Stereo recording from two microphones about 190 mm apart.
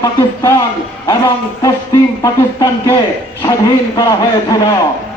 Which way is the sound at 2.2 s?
20° left (ahead or behind).